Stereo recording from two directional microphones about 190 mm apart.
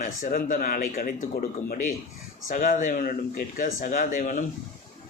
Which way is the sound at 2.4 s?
45° left (ahead or behind).